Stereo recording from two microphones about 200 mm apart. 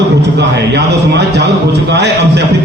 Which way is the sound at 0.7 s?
55° right (ahead or behind).